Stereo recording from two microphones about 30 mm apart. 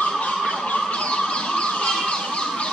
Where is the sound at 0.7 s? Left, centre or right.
Left.